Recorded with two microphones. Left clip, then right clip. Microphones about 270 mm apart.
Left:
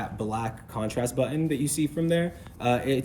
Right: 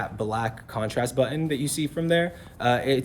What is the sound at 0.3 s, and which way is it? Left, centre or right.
Speech, right.